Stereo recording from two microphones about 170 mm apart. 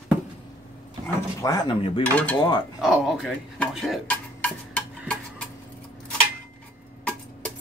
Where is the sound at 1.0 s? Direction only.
20° left (ahead or behind).